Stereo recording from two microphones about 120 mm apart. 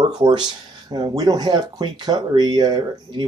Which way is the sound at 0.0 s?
40° right (ahead or behind).